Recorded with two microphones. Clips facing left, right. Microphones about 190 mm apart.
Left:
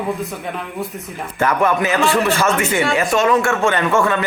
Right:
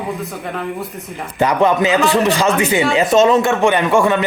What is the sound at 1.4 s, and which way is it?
A man's voice, 20° right (ahead or behind).